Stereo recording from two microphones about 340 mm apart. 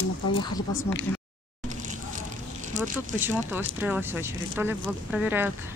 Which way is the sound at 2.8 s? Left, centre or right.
Right.